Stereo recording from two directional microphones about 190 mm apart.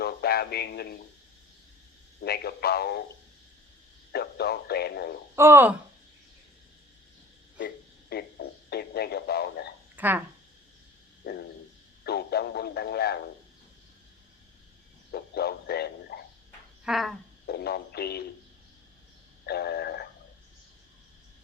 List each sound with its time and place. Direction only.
0.0 s a sound: 55° left (ahead or behind)
2.2 s speech: 55° left (ahead or behind)
4.1 s speech: 55° left (ahead or behind)
5.4 s speech: 10° right (ahead or behind)
8.1 s radio: 55° left (ahead or behind)
9.9 s a sound: 10° right (ahead or behind)
11.2 s a sound: 60° left (ahead or behind)
12.0 s speech: 55° left (ahead or behind)
15.1 s frog: 55° left (ahead or behind)
16.8 s a sound: centre (ahead or behind)
17.4 s speech: 55° left (ahead or behind)
19.5 s frog: 60° left (ahead or behind)